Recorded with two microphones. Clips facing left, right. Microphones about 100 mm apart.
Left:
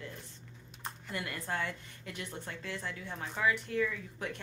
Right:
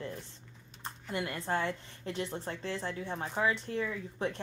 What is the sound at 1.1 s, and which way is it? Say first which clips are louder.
A woman's voice: right 5 dB; 25° right (ahead or behind).